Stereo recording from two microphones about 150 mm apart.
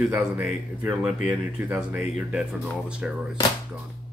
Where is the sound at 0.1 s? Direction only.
15° right (ahead or behind).